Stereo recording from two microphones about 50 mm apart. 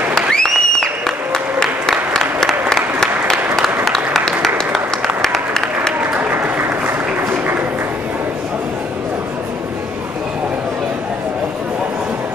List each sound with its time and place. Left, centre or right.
0.3 s applause: centre
5.2 s applause: centre
5.9 s applause: right
6.7 s applause: right